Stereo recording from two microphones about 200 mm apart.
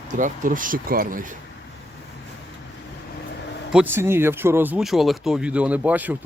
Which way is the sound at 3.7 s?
10° right (ahead or behind).